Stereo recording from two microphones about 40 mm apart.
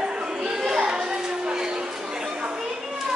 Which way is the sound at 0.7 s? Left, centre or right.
Right.